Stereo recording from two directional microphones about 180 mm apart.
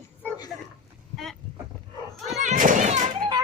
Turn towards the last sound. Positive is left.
turn(degrees=-40)  # may be behind; listen again after turning